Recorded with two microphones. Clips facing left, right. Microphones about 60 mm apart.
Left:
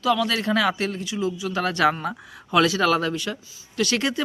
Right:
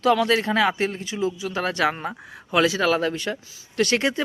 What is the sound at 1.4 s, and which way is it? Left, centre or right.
Speech, centre.